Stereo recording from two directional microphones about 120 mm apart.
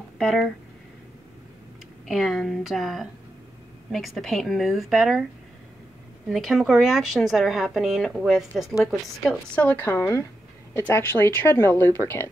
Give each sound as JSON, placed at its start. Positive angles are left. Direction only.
{"t": 0.2, "sound": "speech", "side_deg": 0}
{"t": 2.0, "sound": "speech", "side_deg": 0}
{"t": 6.2, "sound": "speech", "side_deg": 0}
{"t": 9.2, "sound": "a woman's voice", "side_deg": 10}